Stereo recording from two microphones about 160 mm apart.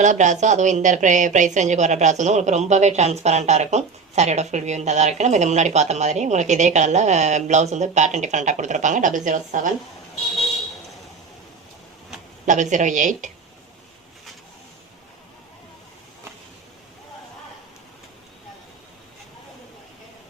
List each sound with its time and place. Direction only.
0.0 s a woman's voice: 50° right (ahead or behind)
12.5 s a woman's voice: 50° right (ahead or behind)